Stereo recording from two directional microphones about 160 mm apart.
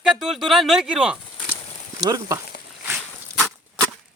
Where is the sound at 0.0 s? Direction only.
5° right (ahead or behind).